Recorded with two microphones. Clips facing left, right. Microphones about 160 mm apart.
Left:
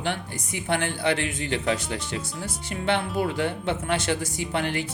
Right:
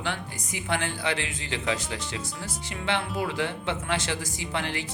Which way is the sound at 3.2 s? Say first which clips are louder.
Left 3 dB; 50° left (ahead or behind).